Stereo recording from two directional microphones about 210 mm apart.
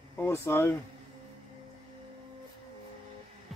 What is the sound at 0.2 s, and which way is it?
Speech, 10° left (ahead or behind).